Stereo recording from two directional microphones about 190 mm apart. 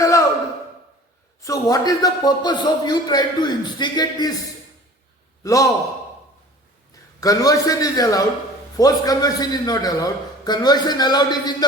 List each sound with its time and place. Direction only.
1.4 s a man's voice: 15° left (ahead or behind)
5.4 s a man's voice: 15° left (ahead or behind)
7.2 s a man's voice: 20° left (ahead or behind)